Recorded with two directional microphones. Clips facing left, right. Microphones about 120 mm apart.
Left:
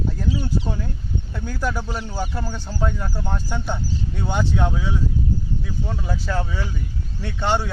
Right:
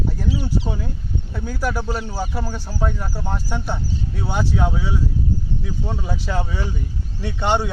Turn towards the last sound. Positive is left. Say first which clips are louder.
# right 2 dB
turn(degrees=-15)  # may be behind; listen again after turning